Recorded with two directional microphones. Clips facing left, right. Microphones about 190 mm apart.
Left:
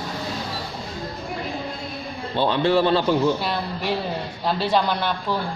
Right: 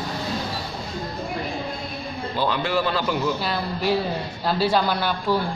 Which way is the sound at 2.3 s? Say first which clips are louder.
Left 4 dB; 30° left (ahead or behind).